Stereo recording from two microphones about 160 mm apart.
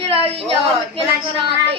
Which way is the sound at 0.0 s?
35° right (ahead or behind).